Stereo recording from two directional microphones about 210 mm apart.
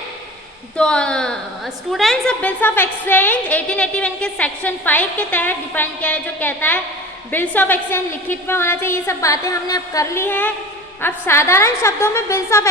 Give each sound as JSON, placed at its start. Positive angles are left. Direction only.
{"t": 0.8, "sound": "a woman's voice", "side_deg": 5}